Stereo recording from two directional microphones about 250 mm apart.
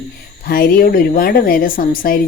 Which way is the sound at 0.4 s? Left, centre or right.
Left.